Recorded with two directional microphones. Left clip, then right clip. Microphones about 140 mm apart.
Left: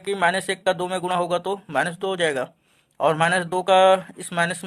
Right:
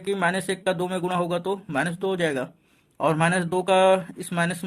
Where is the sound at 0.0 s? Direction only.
30° left (ahead or behind).